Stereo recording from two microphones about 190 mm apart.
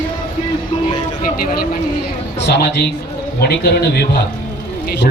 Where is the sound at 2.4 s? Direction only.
60° left (ahead or behind).